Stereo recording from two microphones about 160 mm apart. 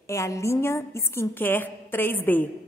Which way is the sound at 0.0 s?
20° left (ahead or behind).